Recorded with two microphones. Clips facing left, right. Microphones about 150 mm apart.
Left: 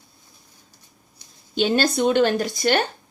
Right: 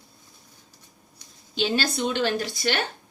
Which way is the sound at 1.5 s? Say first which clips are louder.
Left 5 dB; 50° left (ahead or behind).